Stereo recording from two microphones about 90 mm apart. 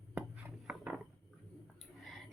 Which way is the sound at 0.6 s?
10° right (ahead or behind).